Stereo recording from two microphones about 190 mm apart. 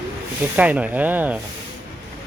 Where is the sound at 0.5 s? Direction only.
10° right (ahead or behind).